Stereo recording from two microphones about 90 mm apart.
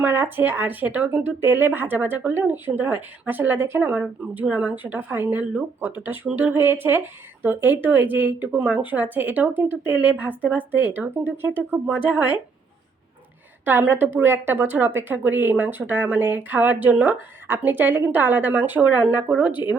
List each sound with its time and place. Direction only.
0.0 s speech: 25° right (ahead or behind)
13.7 s speech: 20° right (ahead or behind)